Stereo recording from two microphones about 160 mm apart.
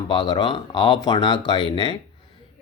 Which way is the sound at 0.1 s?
30° left (ahead or behind).